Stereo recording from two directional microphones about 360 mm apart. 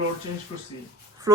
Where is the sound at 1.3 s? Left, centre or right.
Centre.